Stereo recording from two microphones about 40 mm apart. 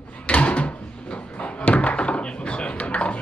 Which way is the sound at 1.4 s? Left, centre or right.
Left.